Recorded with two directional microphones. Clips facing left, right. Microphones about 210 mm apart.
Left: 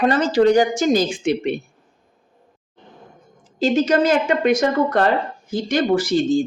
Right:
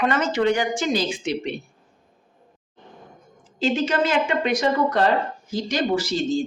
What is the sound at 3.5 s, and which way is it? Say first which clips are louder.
Speech: left 5 dB; 40° left (ahead or behind).